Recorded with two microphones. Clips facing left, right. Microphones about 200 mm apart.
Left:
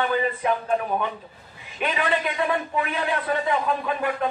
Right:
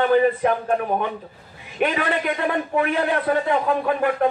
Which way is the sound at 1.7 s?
55° right (ahead or behind).